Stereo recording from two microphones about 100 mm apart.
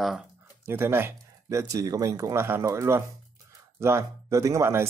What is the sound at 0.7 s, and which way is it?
Speech, 25° right (ahead or behind).